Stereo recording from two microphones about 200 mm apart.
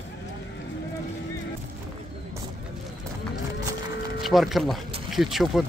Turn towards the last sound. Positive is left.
turn(degrees=0)  # may be behind; listen again after turning